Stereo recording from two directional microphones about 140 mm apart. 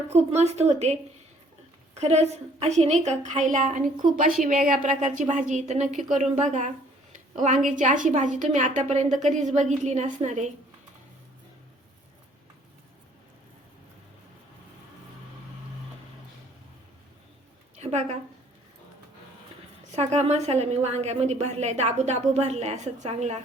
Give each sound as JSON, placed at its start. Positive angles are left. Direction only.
{"t": 0.1, "sound": "a woman's voice", "side_deg": -50}
{"t": 2.0, "sound": "a woman's voice", "side_deg": -50}
{"t": 7.1, "sound": "a sound", "side_deg": -60}
{"t": 7.8, "sound": "a woman's voice", "side_deg": -65}
{"t": 17.7, "sound": "a sound", "side_deg": -55}
{"t": 19.9, "sound": "a woman's voice", "side_deg": -55}